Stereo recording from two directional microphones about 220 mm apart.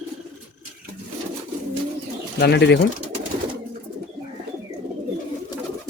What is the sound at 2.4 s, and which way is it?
Speech, 50° left (ahead or behind).